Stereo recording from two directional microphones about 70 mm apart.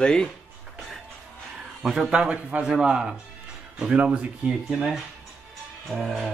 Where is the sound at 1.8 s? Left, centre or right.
Centre.